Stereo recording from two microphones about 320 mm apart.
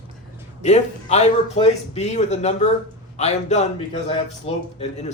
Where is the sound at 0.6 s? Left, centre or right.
Left.